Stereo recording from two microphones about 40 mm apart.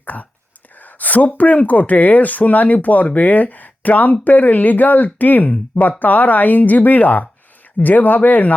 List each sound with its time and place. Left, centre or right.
0.0 s speech: left
0.8 s a sound: left
1.4 s speech: left